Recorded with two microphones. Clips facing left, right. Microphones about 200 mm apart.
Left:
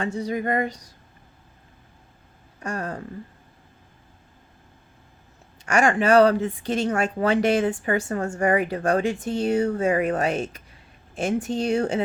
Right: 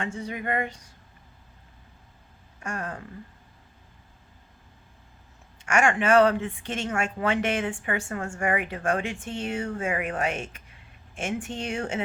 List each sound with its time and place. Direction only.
0.0 s speech: 35° left (ahead or behind)
2.6 s speech: 35° left (ahead or behind)
5.6 s speech: 35° left (ahead or behind)